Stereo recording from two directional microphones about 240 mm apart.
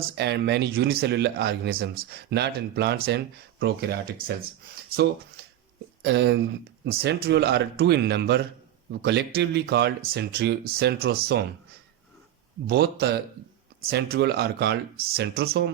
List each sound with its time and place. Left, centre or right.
0.2 s speech: right
6.0 s speech: right
12.6 s a man's voice: right